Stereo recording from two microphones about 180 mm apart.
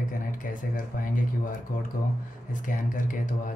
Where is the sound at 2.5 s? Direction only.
45° left (ahead or behind).